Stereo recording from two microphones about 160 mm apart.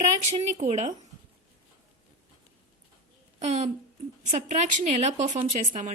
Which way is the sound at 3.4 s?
45° right (ahead or behind).